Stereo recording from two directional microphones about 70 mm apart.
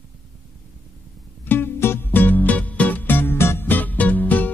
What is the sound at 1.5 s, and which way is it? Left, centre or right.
Music, left.